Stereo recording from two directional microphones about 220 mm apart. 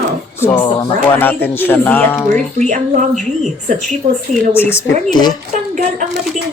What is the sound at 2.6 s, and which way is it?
Speech, 35° right (ahead or behind).